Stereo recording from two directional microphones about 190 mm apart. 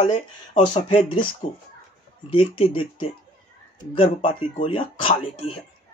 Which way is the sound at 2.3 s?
30° left (ahead or behind).